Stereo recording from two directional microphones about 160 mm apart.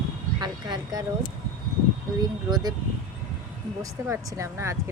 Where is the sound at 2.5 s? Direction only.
25° right (ahead or behind).